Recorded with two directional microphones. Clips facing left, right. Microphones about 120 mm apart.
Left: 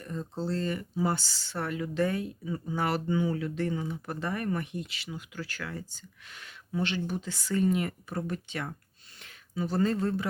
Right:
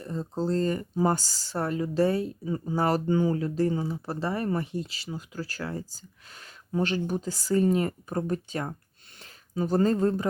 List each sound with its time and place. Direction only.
0.0 s speech: 35° right (ahead or behind)